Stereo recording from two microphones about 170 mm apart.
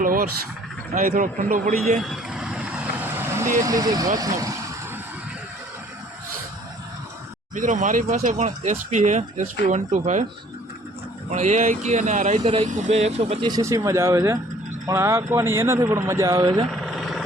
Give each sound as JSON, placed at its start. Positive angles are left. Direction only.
{"t": 0.0, "sound": "speech", "side_deg": -55}
{"t": 2.0, "sound": "vehicle", "side_deg": 0}
{"t": 3.7, "sound": "speech", "side_deg": -20}
{"t": 7.5, "sound": "speech", "side_deg": -50}
{"t": 11.3, "sound": "speech", "side_deg": -45}
{"t": 13.5, "sound": "speech", "side_deg": -20}
{"t": 16.7, "sound": "vehicle", "side_deg": 0}